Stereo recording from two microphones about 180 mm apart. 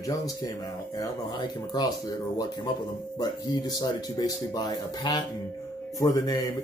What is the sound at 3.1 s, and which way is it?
Speech, 20° left (ahead or behind).